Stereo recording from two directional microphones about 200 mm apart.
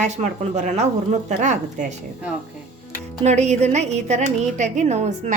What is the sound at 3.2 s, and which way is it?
A woman's voice, 35° right (ahead or behind).